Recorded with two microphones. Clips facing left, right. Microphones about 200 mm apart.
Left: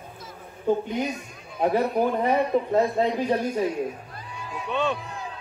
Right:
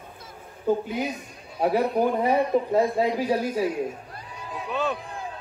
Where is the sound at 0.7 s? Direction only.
5° right (ahead or behind).